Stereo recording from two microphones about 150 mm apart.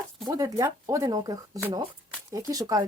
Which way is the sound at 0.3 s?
25° right (ahead or behind).